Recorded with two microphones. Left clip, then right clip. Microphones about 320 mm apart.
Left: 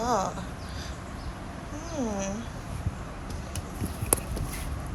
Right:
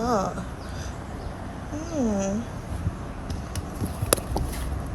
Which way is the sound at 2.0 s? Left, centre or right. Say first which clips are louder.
Right 5 dB; centre.